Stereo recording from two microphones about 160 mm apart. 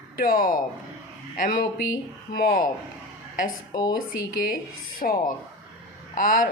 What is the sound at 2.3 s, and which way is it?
Speech, 70° left (ahead or behind).